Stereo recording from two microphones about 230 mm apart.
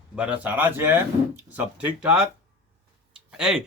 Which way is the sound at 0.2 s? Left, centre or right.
Centre.